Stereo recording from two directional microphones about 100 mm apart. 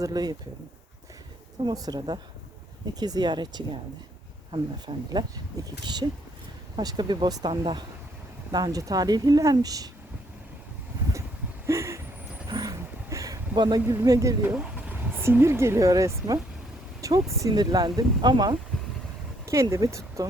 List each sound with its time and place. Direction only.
0.0 s speech: 40° right (ahead or behind)
1.7 s speech: 40° right (ahead or behind)
7.5 s speech: 55° right (ahead or behind)
8.5 s speech: 40° right (ahead or behind)
11.6 s a sound: 30° right (ahead or behind)
14.0 s speech: 35° right (ahead or behind)
14.5 s speech: 15° right (ahead or behind); by 17.3 s 35° right (ahead or behind)
17.5 s speech: 45° right (ahead or behind)
19.5 s speech: 30° right (ahead or behind)